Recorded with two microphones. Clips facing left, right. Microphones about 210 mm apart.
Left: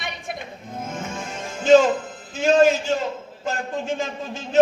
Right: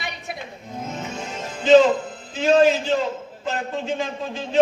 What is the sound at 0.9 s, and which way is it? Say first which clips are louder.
Music: even; 50° left (ahead or behind).